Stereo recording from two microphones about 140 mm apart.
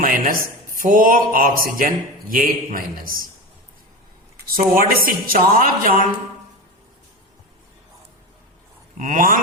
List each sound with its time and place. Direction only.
0.0 s a man's voice: 85° right
4.5 s a woman's voice: 90° right
9.0 s a sound: 65° right (ahead or behind)